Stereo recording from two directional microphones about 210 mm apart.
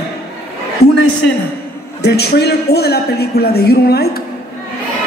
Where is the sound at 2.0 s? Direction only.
50° left (ahead or behind).